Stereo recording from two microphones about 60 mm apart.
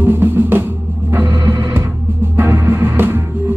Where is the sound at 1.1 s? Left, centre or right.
Right.